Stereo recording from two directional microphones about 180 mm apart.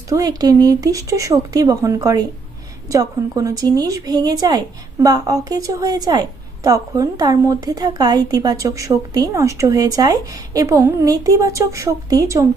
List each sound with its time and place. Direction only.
0.1 s a woman's voice: 20° right (ahead or behind)